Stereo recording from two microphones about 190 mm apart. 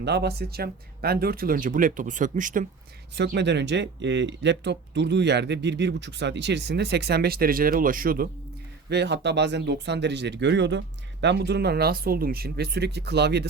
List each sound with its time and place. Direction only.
0.0 s speech: 60° right (ahead or behind); by 2.6 s 45° right (ahead or behind)
3.2 s speech: 65° right (ahead or behind); by 8.3 s 50° right (ahead or behind)
8.9 s speech: 65° right (ahead or behind)